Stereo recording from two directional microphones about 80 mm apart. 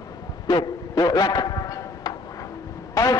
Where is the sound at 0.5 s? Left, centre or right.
Left.